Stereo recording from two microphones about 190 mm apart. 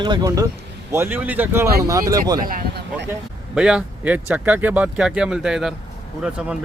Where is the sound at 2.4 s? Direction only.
45° right (ahead or behind).